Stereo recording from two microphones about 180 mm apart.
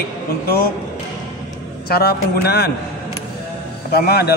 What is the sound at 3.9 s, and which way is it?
Speech, 60° left (ahead or behind).